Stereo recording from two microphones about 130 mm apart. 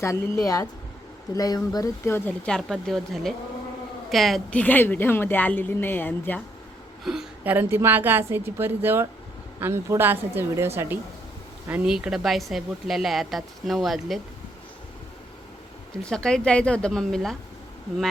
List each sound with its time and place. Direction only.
0.0 s speech: 25° left (ahead or behind)
2.5 s speech: centre (ahead or behind)
4.6 s a woman's voice: 15° left (ahead or behind)
7.0 s speech: 5° right (ahead or behind)
7.5 s a woman's voice: 15° right (ahead or behind); by 14.2 s centre (ahead or behind)
16.0 s speech: 5° left (ahead or behind)